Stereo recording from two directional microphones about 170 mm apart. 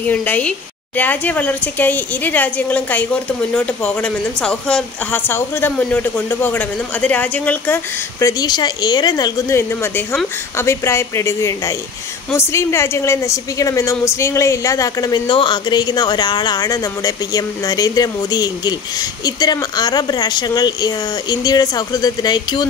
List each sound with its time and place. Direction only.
0.0 s a woman's voice: 10° left (ahead or behind); by 22.7 s 25° left (ahead or behind)